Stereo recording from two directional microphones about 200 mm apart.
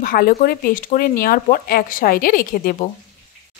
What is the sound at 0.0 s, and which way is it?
Speech, 45° left (ahead or behind).